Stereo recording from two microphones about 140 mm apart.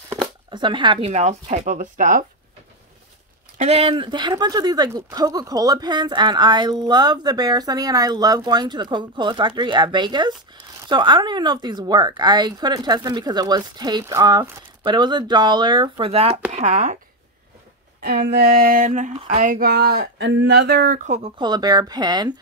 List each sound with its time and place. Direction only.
0.5 s speech: 35° right (ahead or behind)
1.1 s speech: 55° right (ahead or behind)
3.5 s speech: 50° right (ahead or behind)
3.9 s speech: 35° right (ahead or behind)
16.5 s speech: 55° right (ahead or behind)
18.0 s a sound: 90° right; by 19.1 s 65° right (ahead or behind)
19.2 s speech: 70° right (ahead or behind); by 21.1 s 90° right
21.4 s speech: 30° right (ahead or behind)